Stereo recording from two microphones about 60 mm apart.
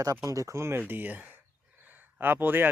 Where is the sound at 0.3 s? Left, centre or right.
Right.